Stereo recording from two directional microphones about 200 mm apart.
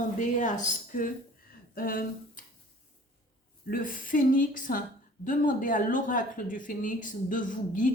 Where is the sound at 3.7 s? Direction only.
45° left (ahead or behind).